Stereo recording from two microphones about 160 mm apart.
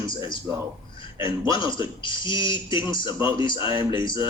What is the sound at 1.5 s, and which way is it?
A man's voice, 30° left (ahead or behind).